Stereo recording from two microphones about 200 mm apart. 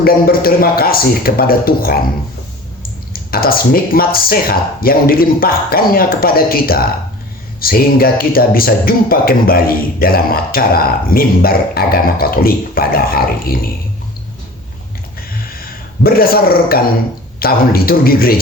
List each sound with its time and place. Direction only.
0.0 s speech: 50° left (ahead or behind)
3.1 s speech: 50° left (ahead or behind)
16.0 s speech: 50° left (ahead or behind)